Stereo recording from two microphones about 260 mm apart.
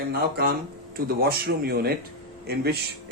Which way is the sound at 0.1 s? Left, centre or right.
Right.